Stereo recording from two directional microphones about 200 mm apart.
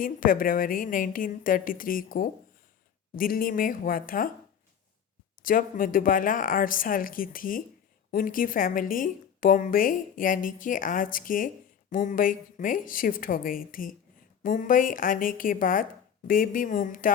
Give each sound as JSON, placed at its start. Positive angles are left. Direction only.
{"t": 0.0, "sound": "a woman's voice", "side_deg": 45}
{"t": 5.4, "sound": "a woman's voice", "side_deg": 45}